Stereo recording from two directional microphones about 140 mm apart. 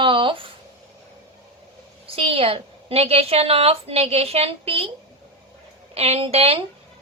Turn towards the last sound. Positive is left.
turn(degrees=-45)  # may be behind; listen again after turning